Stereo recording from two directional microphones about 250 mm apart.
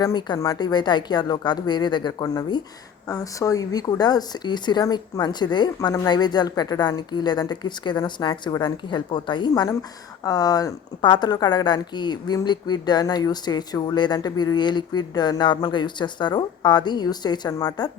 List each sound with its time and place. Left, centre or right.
0.0 s a woman's voice: centre